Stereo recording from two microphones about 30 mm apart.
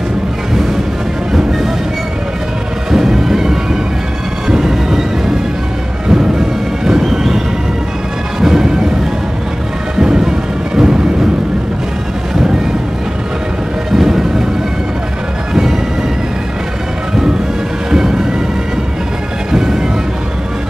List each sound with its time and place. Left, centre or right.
2.9 s music: centre
4.5 s music: right
6.0 s music: centre
8.4 s music: centre
9.9 s music: right
13.9 s music: centre
17.9 s music: right
19.5 s music: centre